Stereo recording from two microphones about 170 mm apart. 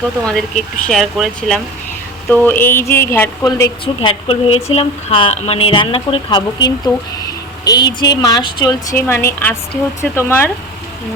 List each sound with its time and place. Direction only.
0.3 s speech: centre (ahead or behind)
4.0 s speech: 35° left (ahead or behind)
9.0 s speech: 15° left (ahead or behind)